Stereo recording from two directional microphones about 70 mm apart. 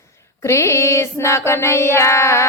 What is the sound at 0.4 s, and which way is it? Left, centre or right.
Child singing, left.